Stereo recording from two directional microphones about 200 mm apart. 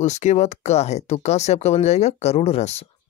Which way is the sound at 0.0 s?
35° left (ahead or behind).